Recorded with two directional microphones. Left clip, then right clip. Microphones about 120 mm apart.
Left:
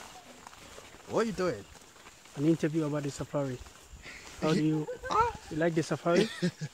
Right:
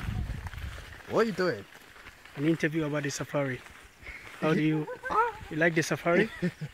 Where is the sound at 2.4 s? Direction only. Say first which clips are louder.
Right 1 dB; 10° left (ahead or behind).